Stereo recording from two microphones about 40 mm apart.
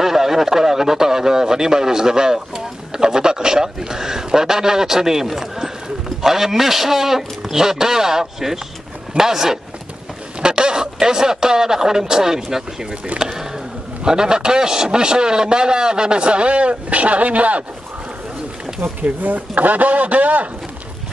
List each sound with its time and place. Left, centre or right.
0.0 s a man's voice: centre; by 17.6 s right
18.8 s speech: right